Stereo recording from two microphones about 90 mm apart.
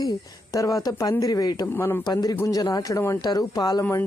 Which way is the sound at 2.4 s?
40° left (ahead or behind).